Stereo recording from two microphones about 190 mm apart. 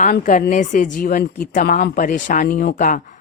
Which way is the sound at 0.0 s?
45° left (ahead or behind).